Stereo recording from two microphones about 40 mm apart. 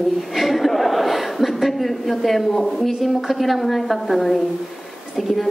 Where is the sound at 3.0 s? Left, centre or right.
Centre.